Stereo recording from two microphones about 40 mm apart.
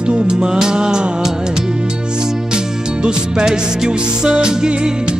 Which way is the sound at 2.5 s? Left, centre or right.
Right.